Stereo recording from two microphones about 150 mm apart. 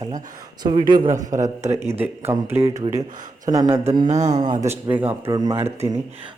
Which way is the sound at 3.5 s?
25° right (ahead or behind).